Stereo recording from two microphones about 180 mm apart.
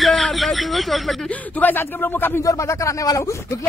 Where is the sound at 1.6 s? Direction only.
10° left (ahead or behind).